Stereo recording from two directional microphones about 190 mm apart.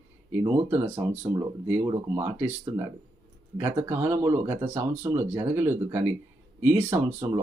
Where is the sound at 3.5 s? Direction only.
10° right (ahead or behind).